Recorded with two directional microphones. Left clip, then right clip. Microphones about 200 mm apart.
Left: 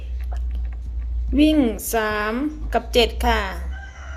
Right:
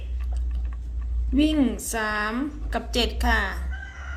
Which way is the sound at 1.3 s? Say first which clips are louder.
Left 5 dB; 40° left (ahead or behind).